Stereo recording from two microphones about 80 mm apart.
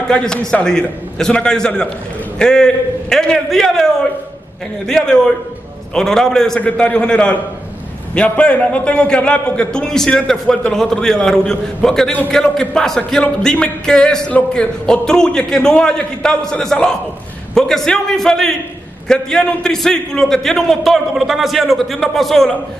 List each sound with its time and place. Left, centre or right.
0.1 s a man's voice: centre